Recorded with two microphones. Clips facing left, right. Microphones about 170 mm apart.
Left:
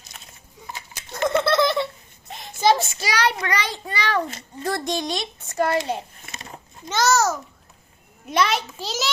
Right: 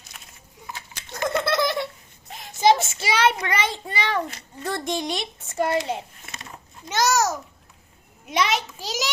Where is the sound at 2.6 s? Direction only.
25° right (ahead or behind).